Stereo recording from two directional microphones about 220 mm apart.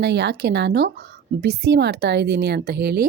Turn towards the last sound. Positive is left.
turn(degrees=-45)  # may be behind; listen again after turning